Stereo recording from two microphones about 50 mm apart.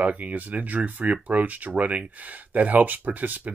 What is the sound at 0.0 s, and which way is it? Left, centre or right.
Speech, right.